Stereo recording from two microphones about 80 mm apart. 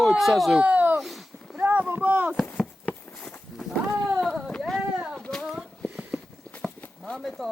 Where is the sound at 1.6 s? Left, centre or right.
Centre.